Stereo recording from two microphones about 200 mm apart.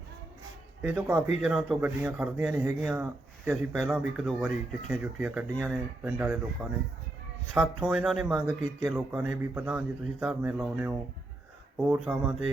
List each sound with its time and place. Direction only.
0.8 s a man's voice: 10° right (ahead or behind)